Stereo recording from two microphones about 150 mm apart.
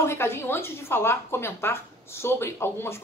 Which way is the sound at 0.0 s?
15° left (ahead or behind).